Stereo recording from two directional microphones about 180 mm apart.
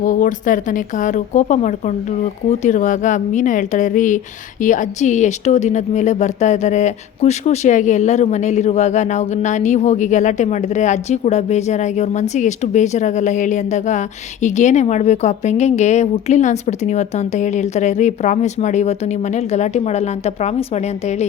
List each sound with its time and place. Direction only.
0.0 s speech: 45° left (ahead or behind)